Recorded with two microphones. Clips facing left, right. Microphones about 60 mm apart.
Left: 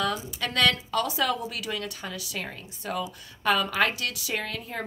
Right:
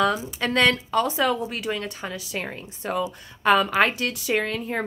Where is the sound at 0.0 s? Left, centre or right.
Right.